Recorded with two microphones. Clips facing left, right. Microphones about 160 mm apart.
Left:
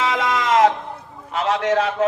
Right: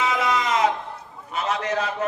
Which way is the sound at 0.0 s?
90° left.